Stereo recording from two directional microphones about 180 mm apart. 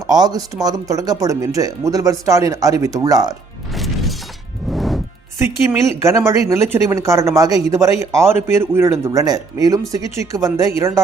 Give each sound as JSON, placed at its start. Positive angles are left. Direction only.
{"t": 0.1, "sound": "speech", "side_deg": -20}
{"t": 3.7, "sound": "music", "side_deg": 0}
{"t": 6.0, "sound": "speech", "side_deg": -15}